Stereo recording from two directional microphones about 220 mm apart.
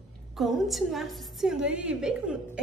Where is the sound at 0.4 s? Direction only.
Centre (ahead or behind).